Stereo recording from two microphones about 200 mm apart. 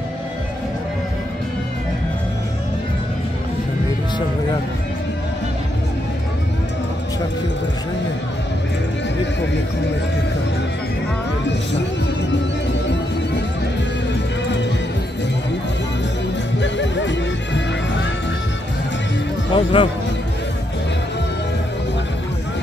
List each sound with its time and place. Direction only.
16.5 s music: 65° left (ahead or behind)
19.5 s a man's voice: 25° left (ahead or behind)